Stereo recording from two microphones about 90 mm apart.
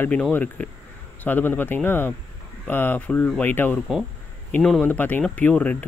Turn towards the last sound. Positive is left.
turn(degrees=15)  # may be behind; listen again after turning